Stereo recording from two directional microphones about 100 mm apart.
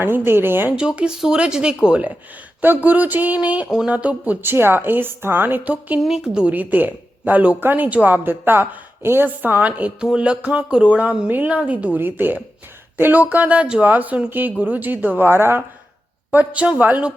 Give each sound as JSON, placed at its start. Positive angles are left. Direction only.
{"t": 0.0, "sound": "speech", "side_deg": -20}
{"t": 0.8, "sound": "a woman's voice", "side_deg": -10}
{"t": 6.0, "sound": "a woman's voice", "side_deg": -5}